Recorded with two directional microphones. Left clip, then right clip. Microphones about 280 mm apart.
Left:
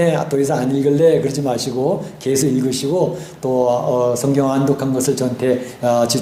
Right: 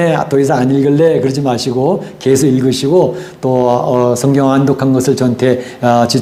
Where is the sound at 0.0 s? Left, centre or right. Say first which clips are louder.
Right 5 dB; right.